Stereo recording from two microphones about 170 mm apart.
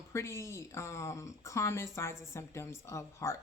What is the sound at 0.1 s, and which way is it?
A woman's voice, 15° left (ahead or behind).